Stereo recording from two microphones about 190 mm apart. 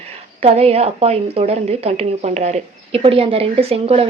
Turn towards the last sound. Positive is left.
turn(degrees=-30)  # may be behind; listen again after turning